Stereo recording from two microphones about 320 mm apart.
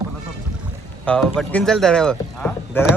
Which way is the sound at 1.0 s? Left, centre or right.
Centre.